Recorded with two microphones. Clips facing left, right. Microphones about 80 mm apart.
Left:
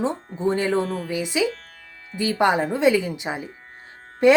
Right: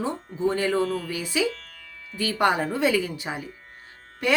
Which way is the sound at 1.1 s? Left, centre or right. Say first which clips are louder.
Left 3 dB; left.